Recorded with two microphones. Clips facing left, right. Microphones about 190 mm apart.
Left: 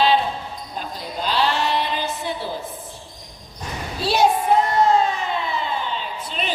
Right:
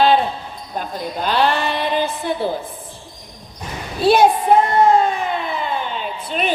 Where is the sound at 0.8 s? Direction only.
55° right (ahead or behind).